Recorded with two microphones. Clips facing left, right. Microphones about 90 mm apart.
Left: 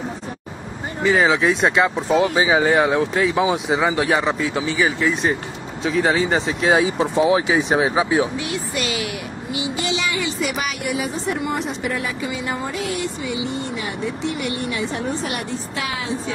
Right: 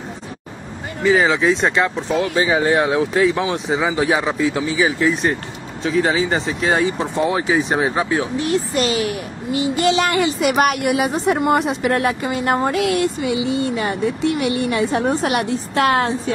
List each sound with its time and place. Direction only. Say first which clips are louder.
1.0 s speech: right 1 dB; centre (ahead or behind)
8.4 s a child's voice: right 6 dB; 40° right (ahead or behind); by 16.3 s 60° right (ahead or behind)